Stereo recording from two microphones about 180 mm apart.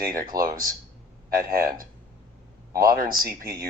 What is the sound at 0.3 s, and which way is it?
Speech, 55° right (ahead or behind).